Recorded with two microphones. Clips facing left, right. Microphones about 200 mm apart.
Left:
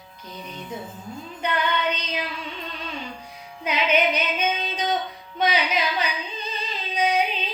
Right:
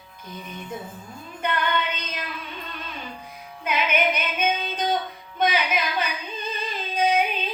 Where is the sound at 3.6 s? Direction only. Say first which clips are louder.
Left 2 dB; 50° right (ahead or behind).